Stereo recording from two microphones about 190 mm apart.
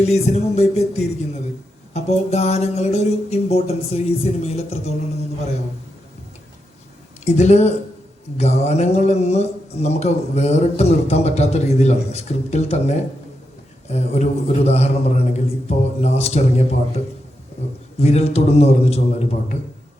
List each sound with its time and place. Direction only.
0.0 s a man's voice: 35° left (ahead or behind)
7.3 s a man's voice: 35° left (ahead or behind)
18.0 s a man's voice: 35° left (ahead or behind)